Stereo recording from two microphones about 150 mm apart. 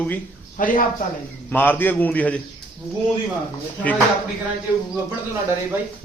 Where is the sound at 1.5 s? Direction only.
15° left (ahead or behind).